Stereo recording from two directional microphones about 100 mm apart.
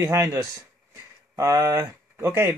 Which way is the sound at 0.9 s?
30° right (ahead or behind).